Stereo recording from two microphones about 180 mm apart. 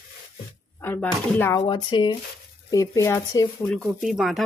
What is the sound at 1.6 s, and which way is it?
Speech, 25° left (ahead or behind).